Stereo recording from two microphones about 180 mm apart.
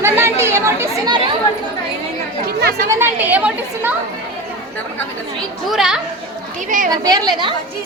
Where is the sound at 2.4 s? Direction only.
60° right (ahead or behind).